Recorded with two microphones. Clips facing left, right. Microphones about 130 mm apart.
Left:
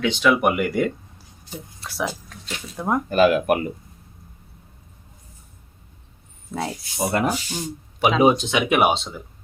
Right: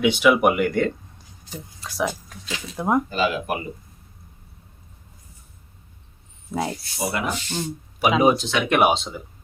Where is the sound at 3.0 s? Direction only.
55° left (ahead or behind).